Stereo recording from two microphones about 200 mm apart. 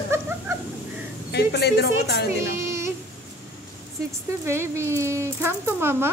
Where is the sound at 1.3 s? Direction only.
55° left (ahead or behind).